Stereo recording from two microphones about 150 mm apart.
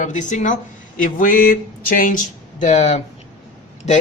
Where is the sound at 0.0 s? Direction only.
55° left (ahead or behind).